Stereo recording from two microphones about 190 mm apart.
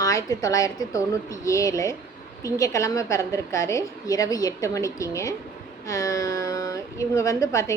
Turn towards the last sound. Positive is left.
turn(degrees=15)  # may be behind; listen again after turning